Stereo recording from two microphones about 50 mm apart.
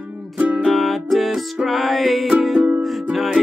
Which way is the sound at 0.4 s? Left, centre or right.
Right.